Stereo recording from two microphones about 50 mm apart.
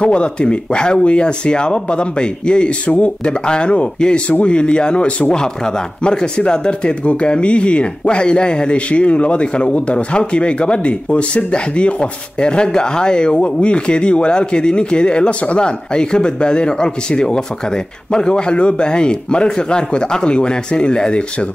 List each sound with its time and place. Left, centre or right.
0.0 s speech: left